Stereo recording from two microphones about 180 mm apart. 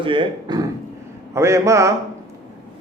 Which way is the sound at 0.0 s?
30° right (ahead or behind).